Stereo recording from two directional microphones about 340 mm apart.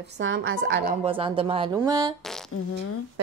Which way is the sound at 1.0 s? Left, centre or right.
Centre.